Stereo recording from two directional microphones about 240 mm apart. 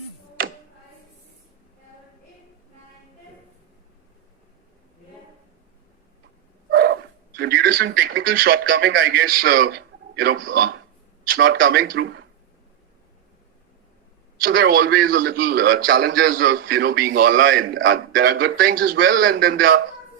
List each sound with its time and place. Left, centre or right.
6.7 s dog: right
8.0 s a man's voice: right
14.4 s a man's voice: right